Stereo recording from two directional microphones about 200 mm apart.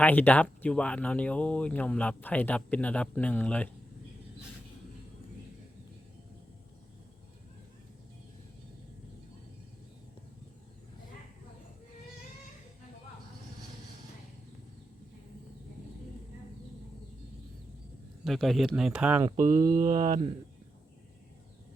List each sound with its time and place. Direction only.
0.0 s speech: 10° left (ahead or behind)
18.3 s speech: centre (ahead or behind)
19.4 s mantra: 45° right (ahead or behind)